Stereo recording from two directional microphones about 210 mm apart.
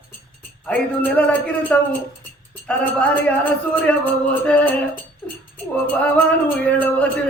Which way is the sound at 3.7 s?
5° left (ahead or behind).